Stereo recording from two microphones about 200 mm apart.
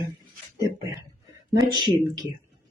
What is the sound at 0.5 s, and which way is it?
Speech, 60° right (ahead or behind).